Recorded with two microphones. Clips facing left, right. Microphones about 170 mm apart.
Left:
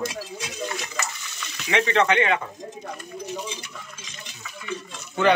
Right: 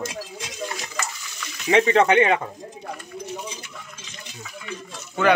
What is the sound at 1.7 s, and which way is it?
Speech, 35° right (ahead or behind).